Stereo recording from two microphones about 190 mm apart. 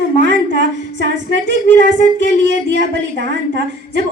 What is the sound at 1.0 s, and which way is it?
A woman's voice, 70° right (ahead or behind).